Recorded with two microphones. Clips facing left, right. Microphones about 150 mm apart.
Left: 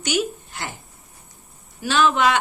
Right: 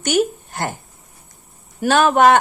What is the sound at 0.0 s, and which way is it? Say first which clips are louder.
Speech: right 6 dB; 50° right (ahead or behind).